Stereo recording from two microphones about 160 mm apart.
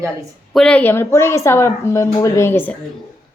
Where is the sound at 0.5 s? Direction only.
5° left (ahead or behind).